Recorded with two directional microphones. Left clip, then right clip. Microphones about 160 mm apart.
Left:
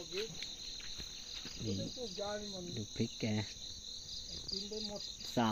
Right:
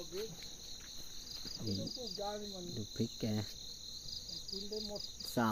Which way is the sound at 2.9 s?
Centre (ahead or behind).